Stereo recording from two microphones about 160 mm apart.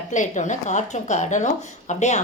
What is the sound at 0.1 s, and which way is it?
A woman's voice, 50° left (ahead or behind).